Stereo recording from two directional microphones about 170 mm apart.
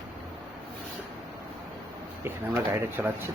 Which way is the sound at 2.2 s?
10° right (ahead or behind).